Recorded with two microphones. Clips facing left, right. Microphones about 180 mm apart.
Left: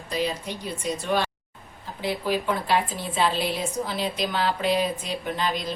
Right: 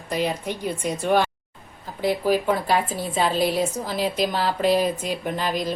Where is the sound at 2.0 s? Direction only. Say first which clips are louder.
Right 5 dB; 40° right (ahead or behind).